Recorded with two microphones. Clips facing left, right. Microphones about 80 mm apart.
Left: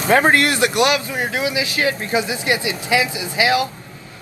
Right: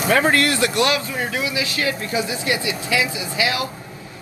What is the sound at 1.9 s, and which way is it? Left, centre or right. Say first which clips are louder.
Speech: left 3 dB; left.